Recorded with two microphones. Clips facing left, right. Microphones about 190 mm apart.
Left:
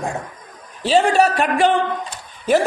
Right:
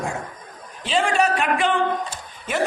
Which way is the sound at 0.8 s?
40° left (ahead or behind).